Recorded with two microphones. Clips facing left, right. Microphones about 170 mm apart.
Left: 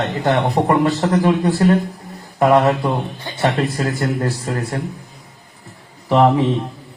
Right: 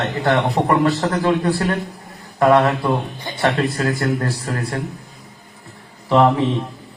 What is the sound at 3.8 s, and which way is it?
Speech, 20° left (ahead or behind).